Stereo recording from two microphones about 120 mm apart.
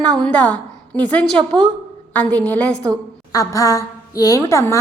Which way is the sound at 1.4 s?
40° right (ahead or behind).